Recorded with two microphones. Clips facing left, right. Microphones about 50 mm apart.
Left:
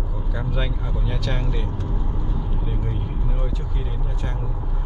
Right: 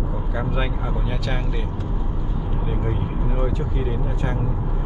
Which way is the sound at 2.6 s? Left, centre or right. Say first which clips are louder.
Right 4 dB; centre.